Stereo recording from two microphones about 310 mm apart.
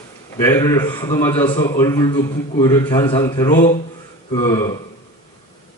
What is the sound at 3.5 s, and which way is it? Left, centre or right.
A man's voice, left.